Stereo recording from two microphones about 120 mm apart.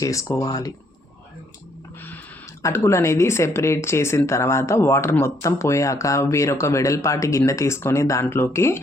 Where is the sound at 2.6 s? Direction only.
20° left (ahead or behind).